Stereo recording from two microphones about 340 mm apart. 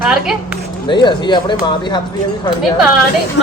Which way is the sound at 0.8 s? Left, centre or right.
Centre.